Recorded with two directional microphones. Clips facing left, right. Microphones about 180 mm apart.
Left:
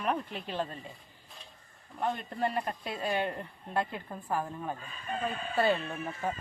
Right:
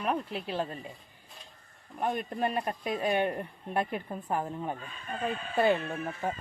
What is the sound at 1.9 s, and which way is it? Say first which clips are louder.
Speech: right 2 dB; 15° right (ahead or behind).